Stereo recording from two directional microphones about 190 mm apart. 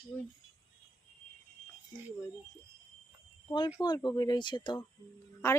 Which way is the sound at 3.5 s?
25° left (ahead or behind).